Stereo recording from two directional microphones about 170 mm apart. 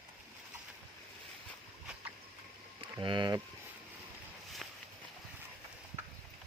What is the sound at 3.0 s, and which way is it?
Speech, 30° right (ahead or behind).